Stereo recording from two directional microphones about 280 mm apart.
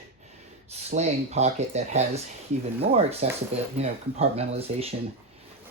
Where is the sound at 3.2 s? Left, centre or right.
Right.